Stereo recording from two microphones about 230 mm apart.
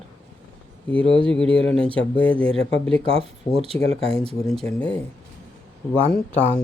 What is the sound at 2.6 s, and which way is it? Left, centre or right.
Speech, left.